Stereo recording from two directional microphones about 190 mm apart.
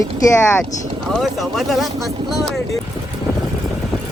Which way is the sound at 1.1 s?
Centre (ahead or behind).